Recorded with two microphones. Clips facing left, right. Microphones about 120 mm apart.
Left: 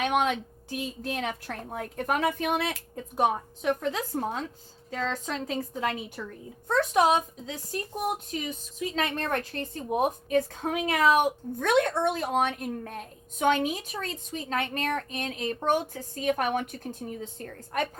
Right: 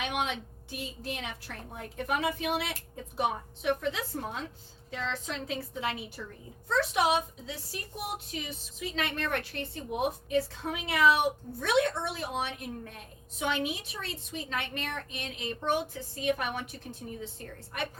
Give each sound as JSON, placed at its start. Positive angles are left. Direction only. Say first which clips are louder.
{"t": 0.0, "sound": "a woman's voice", "louder": "left 7 dB", "side_deg": 50}
{"t": 6.2, "sound": "speech", "louder": "left 4 dB", "side_deg": 65}
{"t": 6.7, "sound": "a woman's voice", "louder": "left 4 dB", "side_deg": 45}